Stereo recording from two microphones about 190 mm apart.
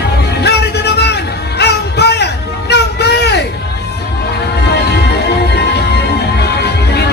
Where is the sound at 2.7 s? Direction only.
60° left (ahead or behind).